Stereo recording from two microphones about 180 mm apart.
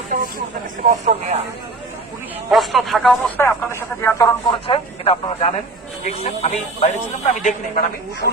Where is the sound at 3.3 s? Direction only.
15° left (ahead or behind).